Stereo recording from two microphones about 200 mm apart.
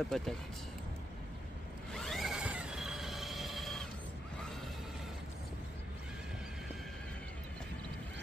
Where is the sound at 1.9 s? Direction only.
Centre (ahead or behind).